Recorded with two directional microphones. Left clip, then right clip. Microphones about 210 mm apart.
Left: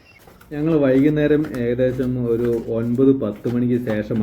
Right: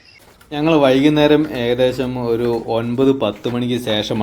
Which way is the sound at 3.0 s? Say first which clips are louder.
Right 1 dB; 70° right (ahead or behind).